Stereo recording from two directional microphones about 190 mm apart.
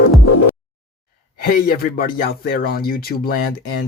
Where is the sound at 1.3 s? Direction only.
50° left (ahead or behind).